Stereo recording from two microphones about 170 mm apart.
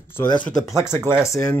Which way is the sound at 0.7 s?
20° right (ahead or behind).